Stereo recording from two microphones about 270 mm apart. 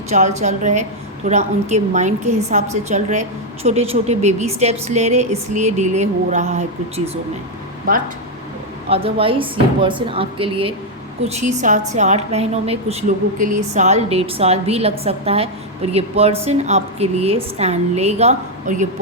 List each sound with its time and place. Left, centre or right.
0.1 s a woman's voice: right
8.9 s a woman's voice: right